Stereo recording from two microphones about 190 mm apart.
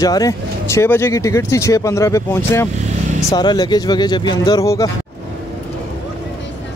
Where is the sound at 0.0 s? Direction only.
20° left (ahead or behind).